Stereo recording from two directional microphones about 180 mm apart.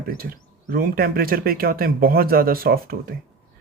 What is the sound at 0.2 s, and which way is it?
Speech, 55° right (ahead or behind).